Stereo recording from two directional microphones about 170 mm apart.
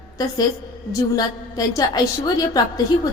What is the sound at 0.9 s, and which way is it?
A woman's voice, 20° left (ahead or behind).